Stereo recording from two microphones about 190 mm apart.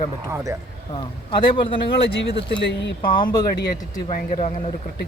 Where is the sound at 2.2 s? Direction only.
65° left (ahead or behind).